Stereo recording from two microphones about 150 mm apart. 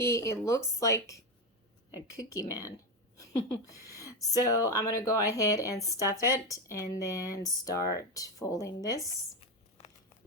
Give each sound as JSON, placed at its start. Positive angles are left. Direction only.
{"t": 0.0, "sound": "speech", "side_deg": 20}
{"t": 9.8, "sound": "crumpling", "side_deg": 45}